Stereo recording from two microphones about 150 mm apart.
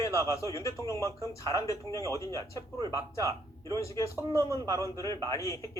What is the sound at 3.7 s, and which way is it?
Speech, 20° left (ahead or behind).